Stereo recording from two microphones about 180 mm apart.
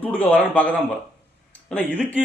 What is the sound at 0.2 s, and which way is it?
A man's voice, 10° left (ahead or behind).